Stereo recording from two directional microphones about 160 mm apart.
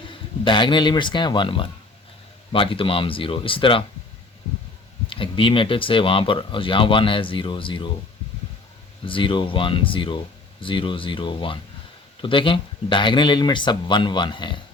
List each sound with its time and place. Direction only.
0.1 s speech: 30° left (ahead or behind)
5.0 s speech: 30° left (ahead or behind)
9.0 s speech: 30° left (ahead or behind)